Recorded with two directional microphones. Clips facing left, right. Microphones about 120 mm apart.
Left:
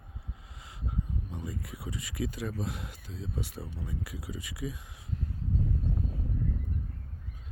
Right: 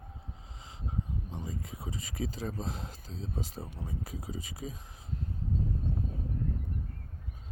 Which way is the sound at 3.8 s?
45° right (ahead or behind).